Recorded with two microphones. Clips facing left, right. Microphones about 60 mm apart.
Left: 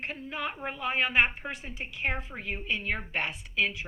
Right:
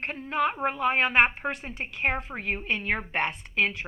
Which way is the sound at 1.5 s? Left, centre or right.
Right.